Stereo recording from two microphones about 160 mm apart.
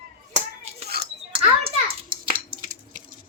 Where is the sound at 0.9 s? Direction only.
75° right (ahead or behind).